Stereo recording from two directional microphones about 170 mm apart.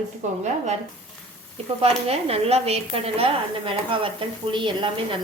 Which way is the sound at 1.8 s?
35° right (ahead or behind).